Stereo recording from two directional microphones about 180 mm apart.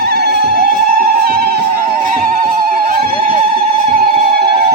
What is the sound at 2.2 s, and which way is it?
Music, 50° right (ahead or behind).